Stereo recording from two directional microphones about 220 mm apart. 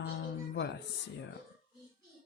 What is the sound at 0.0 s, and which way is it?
Music, 50° left (ahead or behind).